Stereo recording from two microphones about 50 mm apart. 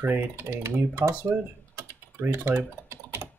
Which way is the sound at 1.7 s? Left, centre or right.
Right.